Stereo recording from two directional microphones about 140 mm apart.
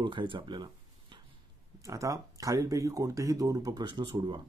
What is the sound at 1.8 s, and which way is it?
Speech, 25° right (ahead or behind).